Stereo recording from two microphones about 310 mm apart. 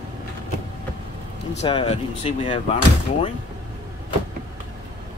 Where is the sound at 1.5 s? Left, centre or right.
Centre.